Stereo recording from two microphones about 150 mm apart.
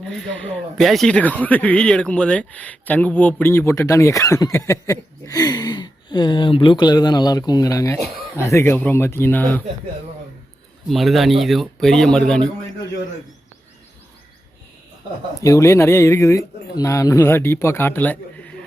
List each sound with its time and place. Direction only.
0.1 s speech: 5° left (ahead or behind)
10.8 s speech: centre (ahead or behind)
15.4 s speech: 20° left (ahead or behind)